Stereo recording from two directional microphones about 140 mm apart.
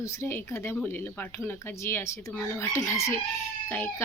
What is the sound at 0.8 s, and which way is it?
Speech, 15° left (ahead or behind).